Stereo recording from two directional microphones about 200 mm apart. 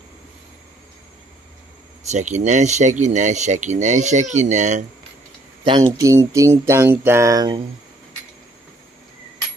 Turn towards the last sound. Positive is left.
turn(degrees=-20)  # may be behind; listen again after turning